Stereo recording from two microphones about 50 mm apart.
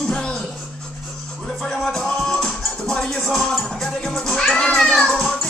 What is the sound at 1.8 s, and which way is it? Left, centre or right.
Music, centre.